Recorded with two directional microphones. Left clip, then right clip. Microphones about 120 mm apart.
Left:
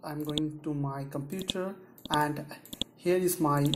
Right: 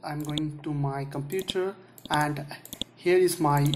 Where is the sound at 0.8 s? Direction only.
30° left (ahead or behind).